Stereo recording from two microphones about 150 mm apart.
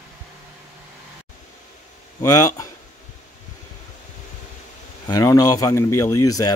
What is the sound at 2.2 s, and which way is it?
Speech, 25° left (ahead or behind).